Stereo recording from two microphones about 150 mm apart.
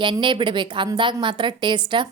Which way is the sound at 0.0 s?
35° right (ahead or behind).